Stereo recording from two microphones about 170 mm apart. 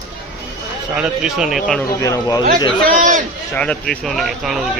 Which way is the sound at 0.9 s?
5° right (ahead or behind).